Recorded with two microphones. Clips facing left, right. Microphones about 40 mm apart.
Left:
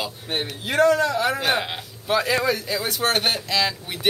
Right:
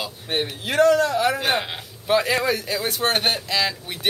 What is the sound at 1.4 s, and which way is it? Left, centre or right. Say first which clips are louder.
Speech: even; centre.